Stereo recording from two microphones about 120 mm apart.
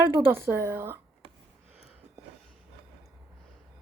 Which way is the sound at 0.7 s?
15° right (ahead or behind).